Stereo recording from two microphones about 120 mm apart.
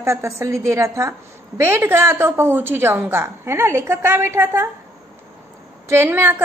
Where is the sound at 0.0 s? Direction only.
25° right (ahead or behind).